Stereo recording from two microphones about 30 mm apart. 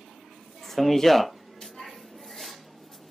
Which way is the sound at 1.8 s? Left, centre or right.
Centre.